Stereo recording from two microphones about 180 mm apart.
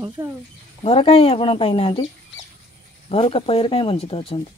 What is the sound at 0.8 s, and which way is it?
Speech, 30° left (ahead or behind).